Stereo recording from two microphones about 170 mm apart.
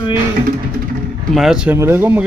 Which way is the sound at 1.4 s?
Centre (ahead or behind).